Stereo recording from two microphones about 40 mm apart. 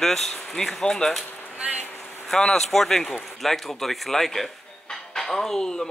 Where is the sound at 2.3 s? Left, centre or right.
Centre.